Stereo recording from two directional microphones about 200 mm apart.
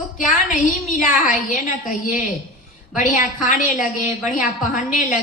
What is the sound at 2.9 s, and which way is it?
A woman's voice, 40° left (ahead or behind).